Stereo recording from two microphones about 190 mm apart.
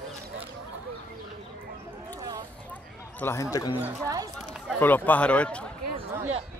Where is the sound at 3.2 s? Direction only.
15° left (ahead or behind).